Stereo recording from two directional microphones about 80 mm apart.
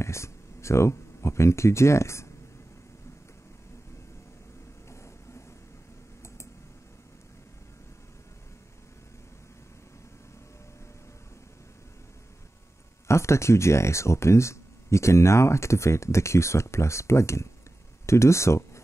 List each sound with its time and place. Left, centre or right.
0.0 s speech: left
4.8 s vehicle: left
13.1 s speech: left